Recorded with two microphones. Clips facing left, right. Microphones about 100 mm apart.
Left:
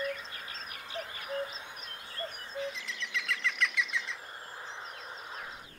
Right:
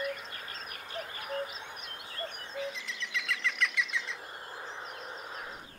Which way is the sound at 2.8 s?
Centre (ahead or behind).